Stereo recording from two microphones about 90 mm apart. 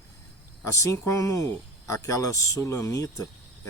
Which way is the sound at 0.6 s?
35° left (ahead or behind).